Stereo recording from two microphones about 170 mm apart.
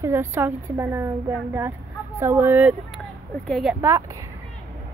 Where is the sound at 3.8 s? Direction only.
20° right (ahead or behind).